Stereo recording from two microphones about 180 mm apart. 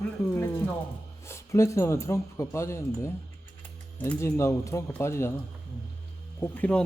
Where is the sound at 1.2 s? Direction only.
15° left (ahead or behind).